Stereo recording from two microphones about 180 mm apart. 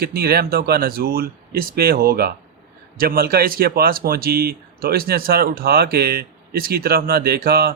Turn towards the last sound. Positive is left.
turn(degrees=-60)  # may be behind; listen again after turning